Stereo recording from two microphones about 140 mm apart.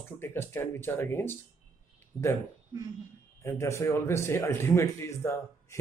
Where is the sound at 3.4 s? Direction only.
20° left (ahead or behind).